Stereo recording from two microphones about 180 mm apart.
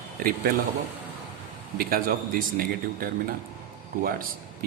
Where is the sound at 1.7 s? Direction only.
55° right (ahead or behind).